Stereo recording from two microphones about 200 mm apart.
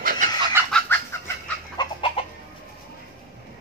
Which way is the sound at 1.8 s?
25° left (ahead or behind).